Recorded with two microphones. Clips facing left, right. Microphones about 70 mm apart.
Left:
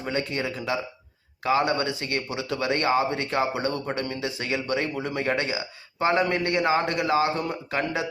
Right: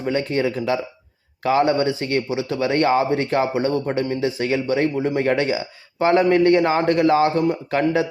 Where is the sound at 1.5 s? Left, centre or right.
Right.